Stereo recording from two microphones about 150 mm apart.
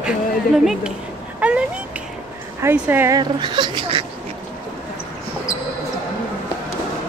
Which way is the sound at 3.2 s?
30° right (ahead or behind).